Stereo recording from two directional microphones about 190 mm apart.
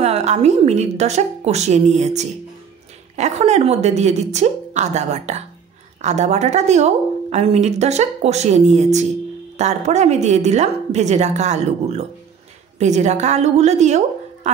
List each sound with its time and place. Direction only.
0.0 s a woman's voice: 35° right (ahead or behind)